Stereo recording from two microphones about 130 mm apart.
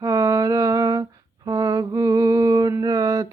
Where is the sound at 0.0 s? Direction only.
25° right (ahead or behind).